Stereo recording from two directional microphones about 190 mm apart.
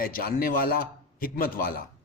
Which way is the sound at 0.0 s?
50° left (ahead or behind).